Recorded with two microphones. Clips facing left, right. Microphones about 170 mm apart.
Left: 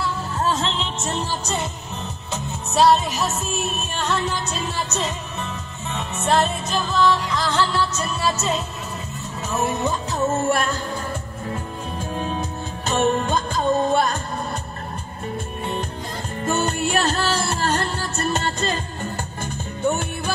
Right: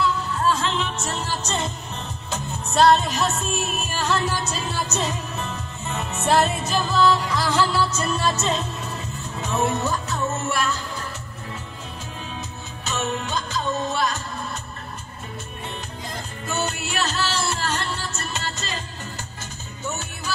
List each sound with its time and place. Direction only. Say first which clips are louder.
0.3 s music: even; 25° left (ahead or behind); by 9.8 s 5° left (ahead or behind)
10.1 s music: left 5 dB; 30° left (ahead or behind)
10.5 s music: left 3 dB; 50° left (ahead or behind)
12.2 s music: left 9 dB; 50° left (ahead or behind)
16.4 s music: left 6 dB; 50° left (ahead or behind)
19.8 s music: left 9 dB; 55° left (ahead or behind)